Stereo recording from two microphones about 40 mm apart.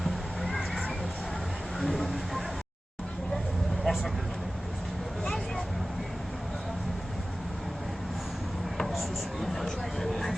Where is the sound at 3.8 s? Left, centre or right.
Centre.